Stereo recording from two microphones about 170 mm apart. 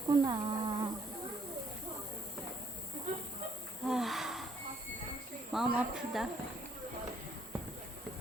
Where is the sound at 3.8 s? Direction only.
Centre (ahead or behind).